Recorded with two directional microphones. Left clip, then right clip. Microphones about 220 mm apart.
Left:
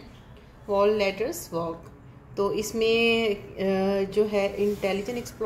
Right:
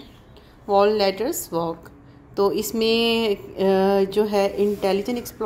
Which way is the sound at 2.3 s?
35° right (ahead or behind).